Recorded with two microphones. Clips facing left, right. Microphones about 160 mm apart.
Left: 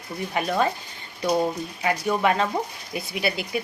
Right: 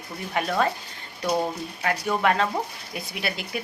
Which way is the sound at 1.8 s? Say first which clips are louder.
Left 2 dB; 5° left (ahead or behind).